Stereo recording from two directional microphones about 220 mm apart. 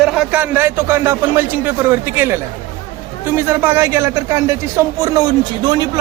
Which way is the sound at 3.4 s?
10° right (ahead or behind).